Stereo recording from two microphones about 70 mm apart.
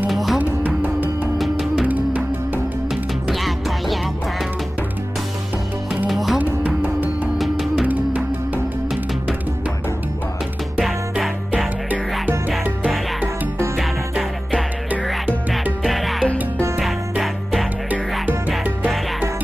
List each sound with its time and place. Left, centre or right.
0.1 s music: centre
0.4 s music: right
1.4 s music: centre
1.9 s music: right
2.9 s music: centre
6.0 s music: centre
6.3 s music: right
7.3 s music: centre
7.8 s music: right
10.8 s music: centre
12.4 s music: centre
15.8 s music: centre